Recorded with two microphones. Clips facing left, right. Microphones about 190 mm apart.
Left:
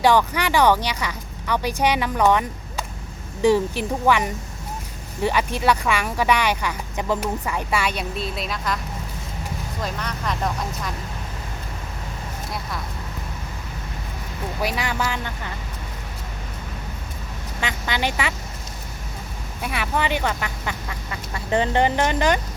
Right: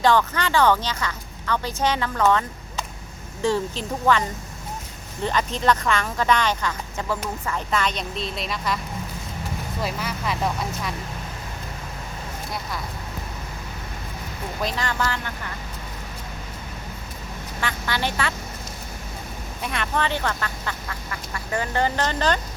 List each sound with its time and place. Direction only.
0.0 s speech: 15° left (ahead or behind)
9.8 s speech: 5° right (ahead or behind)
14.6 s speech: 10° left (ahead or behind)
17.6 s speech: 15° left (ahead or behind)
19.6 s speech: 5° left (ahead or behind)